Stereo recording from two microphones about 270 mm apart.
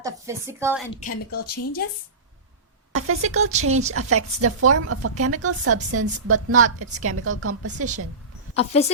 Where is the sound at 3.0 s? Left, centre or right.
Right.